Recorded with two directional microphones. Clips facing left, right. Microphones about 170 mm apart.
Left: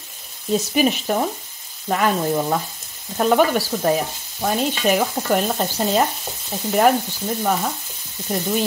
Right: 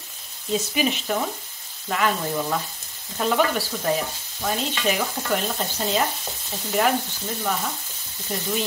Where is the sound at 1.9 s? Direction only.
40° left (ahead or behind).